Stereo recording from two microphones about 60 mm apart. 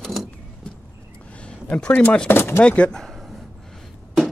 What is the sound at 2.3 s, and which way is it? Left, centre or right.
Speech, left.